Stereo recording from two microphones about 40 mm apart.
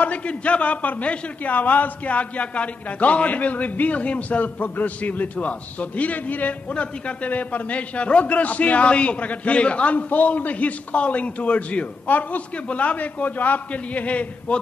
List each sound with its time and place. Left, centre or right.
0.0 s a man's voice: left
6.7 s a man's voice: left
7.2 s a man's voice: left
9.9 s a man's voice: left